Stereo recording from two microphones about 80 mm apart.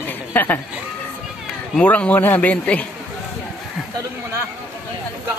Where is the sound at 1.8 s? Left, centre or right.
Centre.